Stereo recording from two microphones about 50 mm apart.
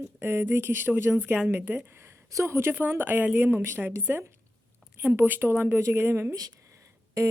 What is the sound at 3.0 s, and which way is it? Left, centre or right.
Speech, right.